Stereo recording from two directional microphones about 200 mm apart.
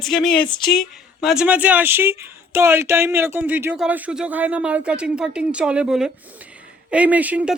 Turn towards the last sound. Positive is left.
turn(degrees=-5)  # may be behind; listen again after turning